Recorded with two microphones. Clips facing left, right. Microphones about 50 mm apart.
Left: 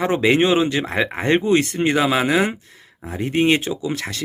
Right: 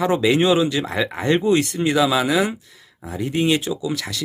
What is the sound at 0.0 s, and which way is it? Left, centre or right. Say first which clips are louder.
A man's voice: left 1 dB; left.